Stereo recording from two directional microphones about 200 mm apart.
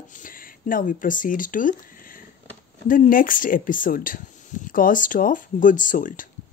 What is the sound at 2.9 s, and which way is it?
Speech, 40° left (ahead or behind).